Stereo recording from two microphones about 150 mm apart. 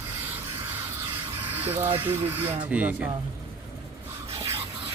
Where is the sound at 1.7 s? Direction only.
15° right (ahead or behind).